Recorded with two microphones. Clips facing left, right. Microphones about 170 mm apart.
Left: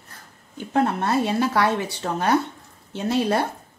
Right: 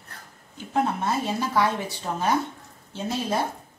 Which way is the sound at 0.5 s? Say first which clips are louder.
Left 3 dB; 65° left (ahead or behind).